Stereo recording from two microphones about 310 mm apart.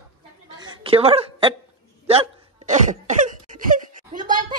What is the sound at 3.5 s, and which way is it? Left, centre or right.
Wail, right.